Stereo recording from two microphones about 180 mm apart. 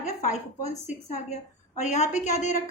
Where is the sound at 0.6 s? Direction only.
40° left (ahead or behind).